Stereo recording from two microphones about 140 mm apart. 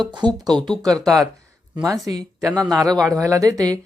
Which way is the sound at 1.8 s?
25° right (ahead or behind).